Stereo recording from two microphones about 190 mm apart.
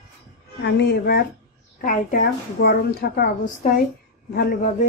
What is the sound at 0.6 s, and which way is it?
Speech, 60° left (ahead or behind).